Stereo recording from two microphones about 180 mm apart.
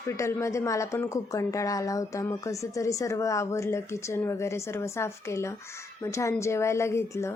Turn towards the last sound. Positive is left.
turn(degrees=15)  # may be behind; listen again after turning